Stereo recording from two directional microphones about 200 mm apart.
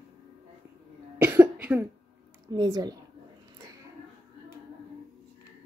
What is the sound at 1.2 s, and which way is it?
Cough, 10° right (ahead or behind).